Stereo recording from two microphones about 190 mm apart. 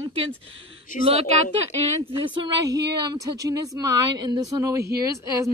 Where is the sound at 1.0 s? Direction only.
35° right (ahead or behind).